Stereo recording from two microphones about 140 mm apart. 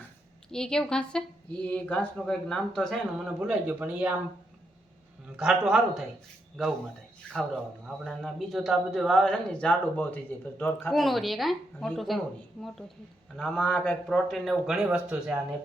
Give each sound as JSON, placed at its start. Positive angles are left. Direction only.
{"t": 0.5, "sound": "speech", "side_deg": 5}
{"t": 5.4, "sound": "speech", "side_deg": -5}
{"t": 7.9, "sound": "speech", "side_deg": 0}
{"t": 10.9, "sound": "speech", "side_deg": 0}
{"t": 13.3, "sound": "a man's voice", "side_deg": 5}